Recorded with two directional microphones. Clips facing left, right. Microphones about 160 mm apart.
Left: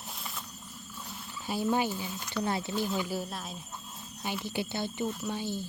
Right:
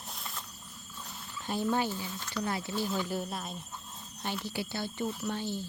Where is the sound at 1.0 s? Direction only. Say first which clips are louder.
Even; 5° left (ahead or behind).